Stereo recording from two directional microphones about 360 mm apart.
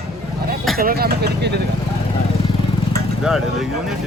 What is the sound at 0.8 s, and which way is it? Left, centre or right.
Speech, right.